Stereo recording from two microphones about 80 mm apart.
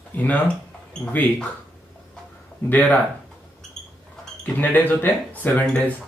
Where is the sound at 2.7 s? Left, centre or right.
Left.